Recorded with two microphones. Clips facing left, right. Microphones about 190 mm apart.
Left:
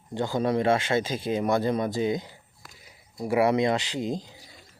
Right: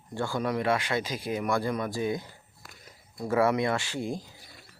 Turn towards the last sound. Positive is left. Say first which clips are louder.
# left 3 dB
turn(degrees=20)  # may be behind; listen again after turning